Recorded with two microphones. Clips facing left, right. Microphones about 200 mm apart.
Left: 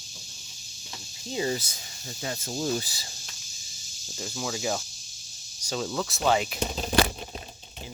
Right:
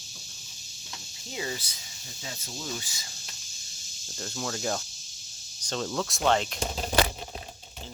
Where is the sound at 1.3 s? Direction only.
30° left (ahead or behind).